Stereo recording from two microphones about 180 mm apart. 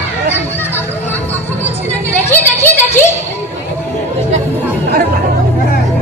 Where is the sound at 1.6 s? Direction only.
10° left (ahead or behind).